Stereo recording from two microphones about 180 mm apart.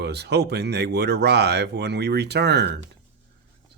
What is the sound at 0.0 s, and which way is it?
Speech, 65° right (ahead or behind).